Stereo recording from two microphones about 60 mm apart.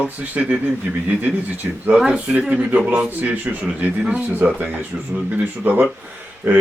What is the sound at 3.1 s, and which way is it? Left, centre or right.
Speech, right.